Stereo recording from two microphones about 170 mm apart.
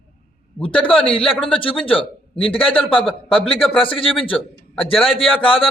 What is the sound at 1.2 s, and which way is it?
Speech, 5° left (ahead or behind).